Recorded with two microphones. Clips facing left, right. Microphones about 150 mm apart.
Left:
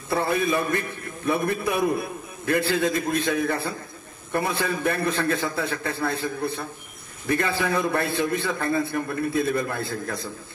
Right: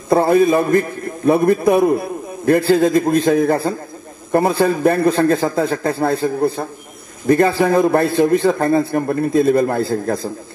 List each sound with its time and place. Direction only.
0.1 s a man's voice: 40° right (ahead or behind)